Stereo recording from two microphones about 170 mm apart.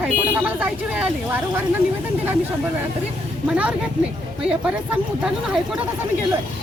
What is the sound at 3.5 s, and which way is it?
Speech, 5° right (ahead or behind).